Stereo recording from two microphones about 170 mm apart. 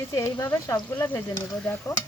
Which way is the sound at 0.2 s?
15° left (ahead or behind).